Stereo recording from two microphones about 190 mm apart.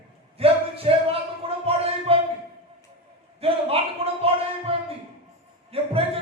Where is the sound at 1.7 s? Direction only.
30° right (ahead or behind).